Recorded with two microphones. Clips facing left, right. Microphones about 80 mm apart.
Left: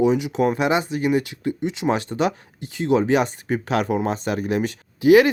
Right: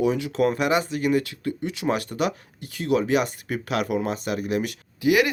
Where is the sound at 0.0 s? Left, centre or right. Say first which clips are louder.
Left 3 dB; centre.